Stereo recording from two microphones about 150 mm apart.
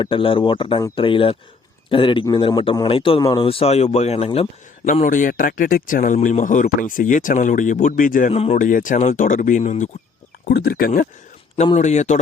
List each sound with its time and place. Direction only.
0.0 s speech: 35° left (ahead or behind)
4.9 s speech: 60° left (ahead or behind)
8.3 s a man's voice: 45° left (ahead or behind)
8.5 s speech: 60° left (ahead or behind)
10.4 s speech: 90° left
11.5 s a man's voice: 45° left (ahead or behind)